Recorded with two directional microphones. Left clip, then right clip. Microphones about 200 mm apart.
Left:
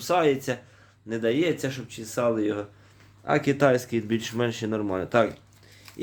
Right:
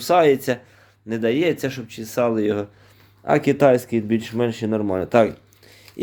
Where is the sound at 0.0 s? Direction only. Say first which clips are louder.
Right 7 dB; 40° right (ahead or behind).